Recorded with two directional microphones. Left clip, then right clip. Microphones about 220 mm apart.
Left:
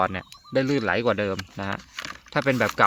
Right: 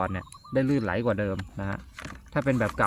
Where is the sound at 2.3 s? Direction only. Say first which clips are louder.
Left 4 dB; 45° left (ahead or behind).